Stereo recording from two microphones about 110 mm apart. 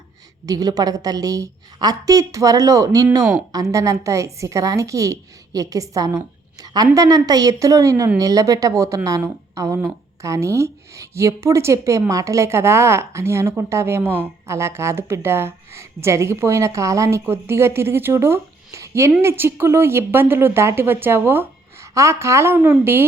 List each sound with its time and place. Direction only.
0.4 s a woman's voice: 35° right (ahead or behind)